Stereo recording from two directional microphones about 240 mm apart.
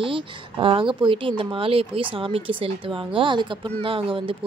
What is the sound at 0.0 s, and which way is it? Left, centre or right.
Speech, right.